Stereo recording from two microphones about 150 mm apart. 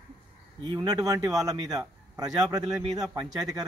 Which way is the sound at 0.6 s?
30° right (ahead or behind).